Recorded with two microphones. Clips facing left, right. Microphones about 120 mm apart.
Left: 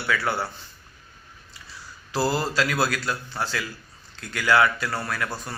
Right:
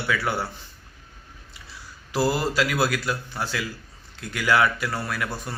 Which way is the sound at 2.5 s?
15° right (ahead or behind).